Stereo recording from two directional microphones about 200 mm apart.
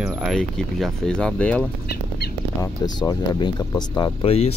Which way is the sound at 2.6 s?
20° left (ahead or behind).